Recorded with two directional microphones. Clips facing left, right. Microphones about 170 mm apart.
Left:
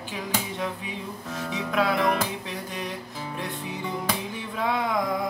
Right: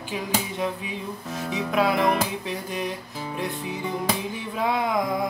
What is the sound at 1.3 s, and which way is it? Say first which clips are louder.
Music: right 2 dB; 10° right (ahead or behind).